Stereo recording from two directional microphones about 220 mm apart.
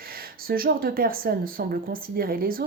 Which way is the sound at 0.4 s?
40° right (ahead or behind).